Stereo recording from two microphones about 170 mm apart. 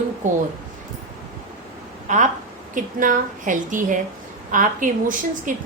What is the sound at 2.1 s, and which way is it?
A woman's voice, 45° right (ahead or behind).